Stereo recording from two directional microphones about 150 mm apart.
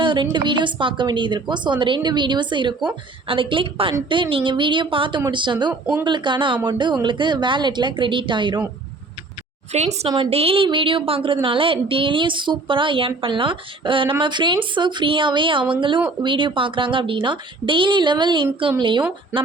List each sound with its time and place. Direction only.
0.0 s a woman's voice: 30° right (ahead or behind)
5.8 s speech: 5° right (ahead or behind)
6.1 s a woman's voice: 30° right (ahead or behind)
9.7 s a woman's voice: 45° right (ahead or behind)